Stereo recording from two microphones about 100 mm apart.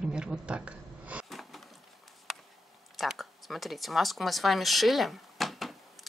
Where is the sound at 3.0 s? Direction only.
Centre (ahead or behind).